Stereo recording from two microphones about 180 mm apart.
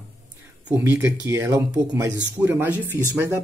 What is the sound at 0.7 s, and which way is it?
Speech, 10° right (ahead or behind).